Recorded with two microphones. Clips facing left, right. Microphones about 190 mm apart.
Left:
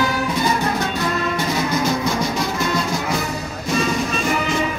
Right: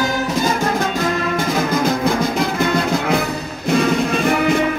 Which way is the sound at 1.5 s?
55° right (ahead or behind).